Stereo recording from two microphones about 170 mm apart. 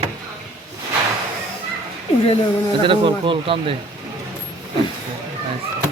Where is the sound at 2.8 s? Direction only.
30° right (ahead or behind).